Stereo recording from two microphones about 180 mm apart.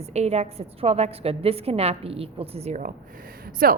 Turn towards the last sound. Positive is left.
turn(degrees=-55)  # may be behind; listen again after turning